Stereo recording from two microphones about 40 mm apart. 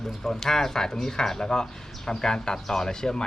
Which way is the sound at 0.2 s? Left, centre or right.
Centre.